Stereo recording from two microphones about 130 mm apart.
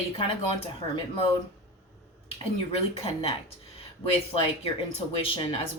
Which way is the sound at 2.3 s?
50° left (ahead or behind).